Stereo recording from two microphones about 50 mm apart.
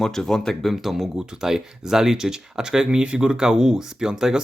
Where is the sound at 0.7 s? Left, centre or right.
Centre.